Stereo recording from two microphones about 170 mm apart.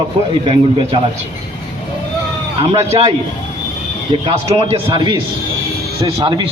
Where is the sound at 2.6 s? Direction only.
35° right (ahead or behind).